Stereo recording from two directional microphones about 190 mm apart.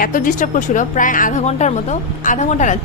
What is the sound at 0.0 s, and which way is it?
A woman's voice, 45° left (ahead or behind).